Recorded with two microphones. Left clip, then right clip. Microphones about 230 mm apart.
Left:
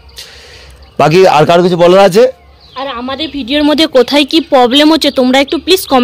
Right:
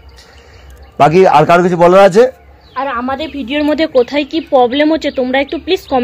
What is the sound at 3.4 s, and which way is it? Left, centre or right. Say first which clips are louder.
Speech: left 5 dB; left.